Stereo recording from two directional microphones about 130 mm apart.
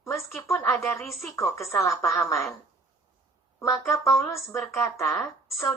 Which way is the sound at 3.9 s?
20° left (ahead or behind).